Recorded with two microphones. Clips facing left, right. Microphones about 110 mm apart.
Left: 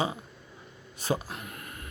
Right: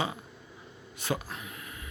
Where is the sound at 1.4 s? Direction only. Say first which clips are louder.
Left 1 dB; 50° left (ahead or behind).